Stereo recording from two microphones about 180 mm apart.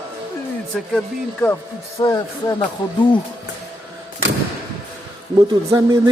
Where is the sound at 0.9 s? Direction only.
10° left (ahead or behind).